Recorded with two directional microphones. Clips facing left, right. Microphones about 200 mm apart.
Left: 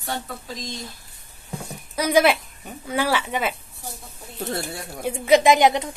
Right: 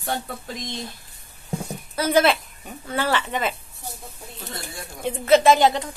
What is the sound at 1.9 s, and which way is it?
A woman's voice, 10° left (ahead or behind).